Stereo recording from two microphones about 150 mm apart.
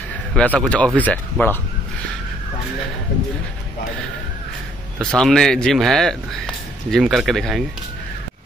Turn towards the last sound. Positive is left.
turn(degrees=0)  # may be behind; listen again after turning